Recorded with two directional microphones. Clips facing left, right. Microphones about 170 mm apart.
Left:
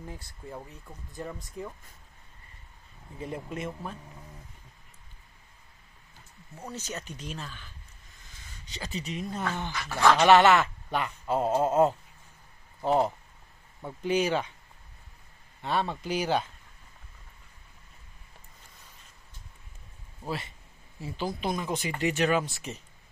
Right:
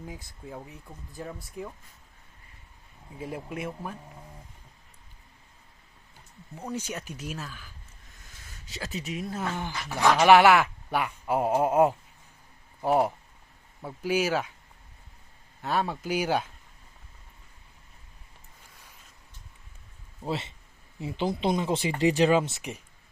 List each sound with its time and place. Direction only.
0.4 s speech: 5° right (ahead or behind)
3.2 s speech: 10° right (ahead or behind)
6.6 s speech: 10° right (ahead or behind)
9.6 s speech: 15° right (ahead or behind)
15.6 s speech: 5° right (ahead or behind)
20.2 s speech: 25° right (ahead or behind)